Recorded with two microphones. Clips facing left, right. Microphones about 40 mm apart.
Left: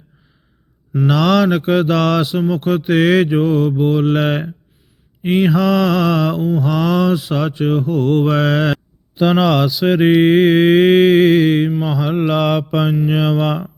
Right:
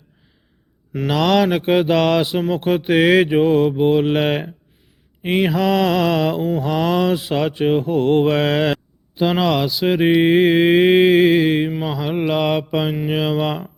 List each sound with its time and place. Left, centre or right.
1.0 s speech: centre
2.2 s mantra: right; by 4.5 s centre
5.2 s speech: centre
6.4 s mantra: right
6.7 s mantra: centre
9.1 s mantra: centre